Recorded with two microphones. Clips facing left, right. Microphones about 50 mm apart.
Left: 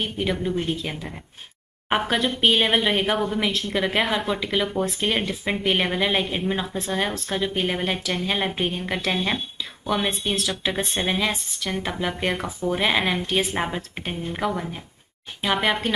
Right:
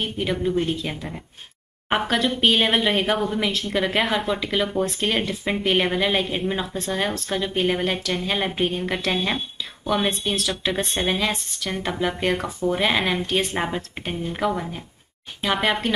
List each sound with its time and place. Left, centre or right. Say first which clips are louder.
0.0 s speech: right 1 dB; centre